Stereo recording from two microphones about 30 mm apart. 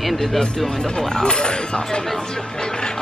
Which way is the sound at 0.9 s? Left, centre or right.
Left.